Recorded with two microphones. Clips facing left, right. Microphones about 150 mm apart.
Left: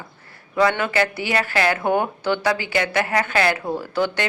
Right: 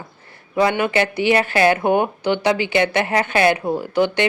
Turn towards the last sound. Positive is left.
turn(degrees=-20)  # may be behind; listen again after turning